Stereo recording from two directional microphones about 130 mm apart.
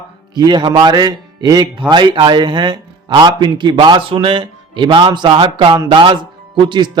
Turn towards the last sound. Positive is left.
turn(degrees=-35)  # may be behind; listen again after turning